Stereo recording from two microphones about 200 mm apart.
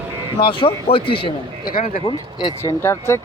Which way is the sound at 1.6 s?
45° left (ahead or behind).